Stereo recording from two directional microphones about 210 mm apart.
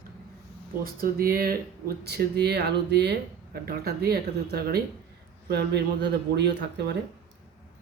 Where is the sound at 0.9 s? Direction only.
45° right (ahead or behind).